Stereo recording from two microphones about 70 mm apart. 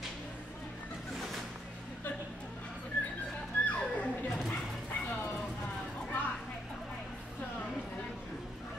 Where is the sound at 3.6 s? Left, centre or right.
Left.